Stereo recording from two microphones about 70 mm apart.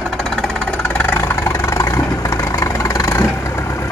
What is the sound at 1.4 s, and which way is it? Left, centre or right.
Vehicle, left.